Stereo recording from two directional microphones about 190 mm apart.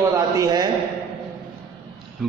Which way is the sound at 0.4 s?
20° right (ahead or behind).